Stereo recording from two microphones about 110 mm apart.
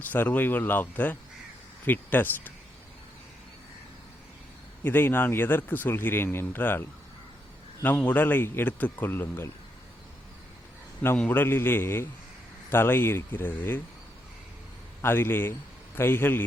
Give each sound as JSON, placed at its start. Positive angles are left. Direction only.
{"t": 0.1, "sound": "speech", "side_deg": 15}
{"t": 4.8, "sound": "speech", "side_deg": 20}
{"t": 7.9, "sound": "speech", "side_deg": 15}
{"t": 11.2, "sound": "speech", "side_deg": 20}
{"t": 15.0, "sound": "speech", "side_deg": 20}